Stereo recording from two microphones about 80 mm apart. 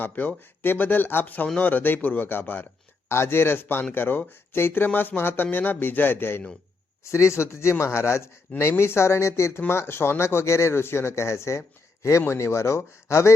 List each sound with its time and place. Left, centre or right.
0.0 s speech: left